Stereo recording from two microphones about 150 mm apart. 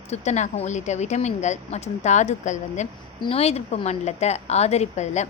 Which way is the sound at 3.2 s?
40° left (ahead or behind).